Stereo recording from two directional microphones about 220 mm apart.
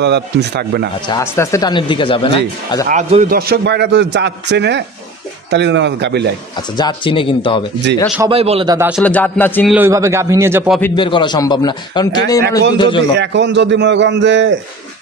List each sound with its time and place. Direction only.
0.0 s a man's voice: 50° right (ahead or behind)
1.0 s speech: 15° left (ahead or behind)
2.9 s a man's voice: 30° right (ahead or behind)
3.3 s a man's voice: 45° right (ahead or behind)
6.8 s speech: 20° left (ahead or behind)
8.3 s speech: 25° right (ahead or behind)
8.7 s a man's voice: 5° right (ahead or behind)
9.0 s speech: 10° left (ahead or behind)
9.7 s a man's voice: 10° right (ahead or behind)
11.0 s speech: 20° left (ahead or behind)
13.1 s a man's voice: 50° right (ahead or behind)